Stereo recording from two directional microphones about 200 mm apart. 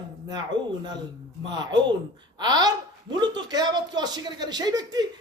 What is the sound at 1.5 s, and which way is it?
A man's voice, 20° right (ahead or behind).